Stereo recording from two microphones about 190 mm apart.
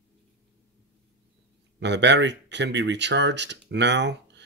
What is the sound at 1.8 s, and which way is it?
Speech, 65° right (ahead or behind).